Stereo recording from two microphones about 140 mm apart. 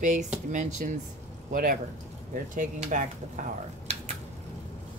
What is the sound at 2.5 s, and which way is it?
Speech, 65° right (ahead or behind).